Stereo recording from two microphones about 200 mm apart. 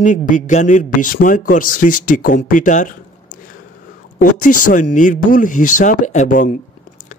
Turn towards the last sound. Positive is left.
turn(degrees=40)  # may be behind; listen again after turning